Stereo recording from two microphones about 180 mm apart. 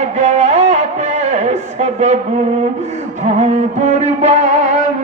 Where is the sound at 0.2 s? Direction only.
40° right (ahead or behind).